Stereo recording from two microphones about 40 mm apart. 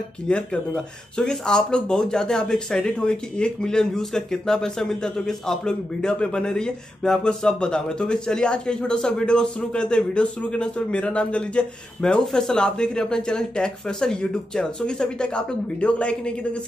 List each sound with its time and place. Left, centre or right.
0.3 s a man's voice: left